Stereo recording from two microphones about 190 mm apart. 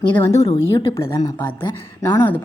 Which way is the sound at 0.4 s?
25° left (ahead or behind).